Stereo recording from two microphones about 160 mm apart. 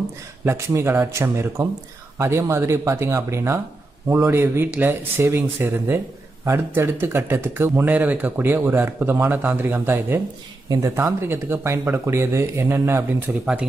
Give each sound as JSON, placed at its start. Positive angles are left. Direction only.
{"t": 0.5, "sound": "speech", "side_deg": -15}